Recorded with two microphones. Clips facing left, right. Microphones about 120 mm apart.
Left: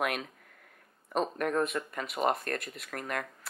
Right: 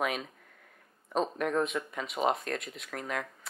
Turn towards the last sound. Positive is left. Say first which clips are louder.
# even
turn(degrees=0)  # may be behind; listen again after turning